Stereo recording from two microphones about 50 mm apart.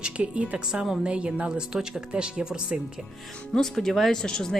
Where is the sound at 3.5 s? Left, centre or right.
Centre.